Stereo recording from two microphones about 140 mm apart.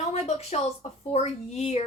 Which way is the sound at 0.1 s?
50° left (ahead or behind).